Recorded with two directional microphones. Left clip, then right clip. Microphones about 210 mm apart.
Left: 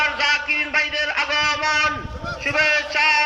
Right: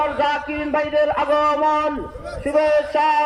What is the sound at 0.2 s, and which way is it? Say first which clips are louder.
A man's voice: left 1 dB; 35° right (ahead or behind).